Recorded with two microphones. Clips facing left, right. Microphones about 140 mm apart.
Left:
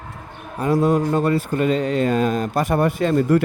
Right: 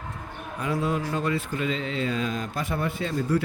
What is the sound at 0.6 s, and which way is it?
Speech, 40° left (ahead or behind).